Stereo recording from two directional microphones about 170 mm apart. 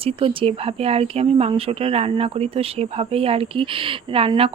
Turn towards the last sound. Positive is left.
turn(degrees=-35)  # may be behind; listen again after turning